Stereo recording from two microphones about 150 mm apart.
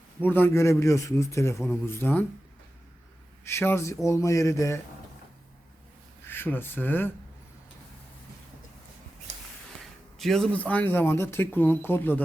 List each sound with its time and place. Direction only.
0.2 s a man's voice: 15° left (ahead or behind)
3.4 s a man's voice: 15° left (ahead or behind)
6.2 s speech: 15° left (ahead or behind)
10.2 s a man's voice: 5° left (ahead or behind)